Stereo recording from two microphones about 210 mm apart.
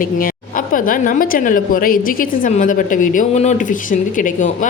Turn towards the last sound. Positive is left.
turn(degrees=40)  # may be behind; listen again after turning